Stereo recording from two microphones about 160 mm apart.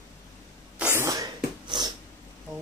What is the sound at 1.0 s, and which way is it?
Sneeze, 20° right (ahead or behind).